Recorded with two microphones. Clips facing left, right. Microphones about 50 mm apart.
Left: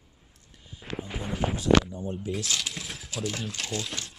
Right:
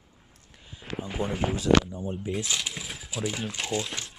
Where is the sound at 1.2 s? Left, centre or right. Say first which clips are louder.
Right 7 dB; right.